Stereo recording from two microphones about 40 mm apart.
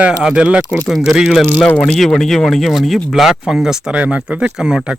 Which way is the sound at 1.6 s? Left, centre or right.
Left.